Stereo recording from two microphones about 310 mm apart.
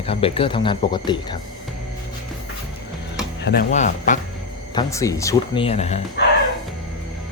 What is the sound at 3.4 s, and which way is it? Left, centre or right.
Speech, left.